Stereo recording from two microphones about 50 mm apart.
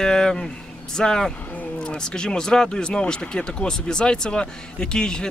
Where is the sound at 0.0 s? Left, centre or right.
Centre.